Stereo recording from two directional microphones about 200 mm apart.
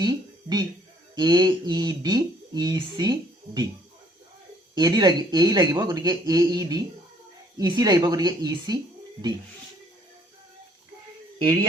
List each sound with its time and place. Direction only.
0.0 s a sound: 20° right (ahead or behind)
1.1 s speech: 20° right (ahead or behind)
4.7 s speech: 20° right (ahead or behind)